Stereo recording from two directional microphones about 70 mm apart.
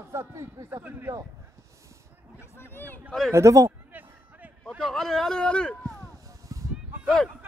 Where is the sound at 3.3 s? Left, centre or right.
Right.